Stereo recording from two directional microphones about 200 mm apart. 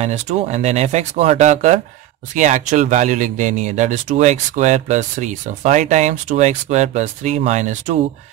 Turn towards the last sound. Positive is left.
turn(degrees=-35)  # may be behind; listen again after turning